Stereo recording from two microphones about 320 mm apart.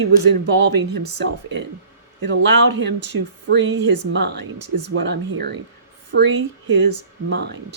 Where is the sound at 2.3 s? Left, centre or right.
Right.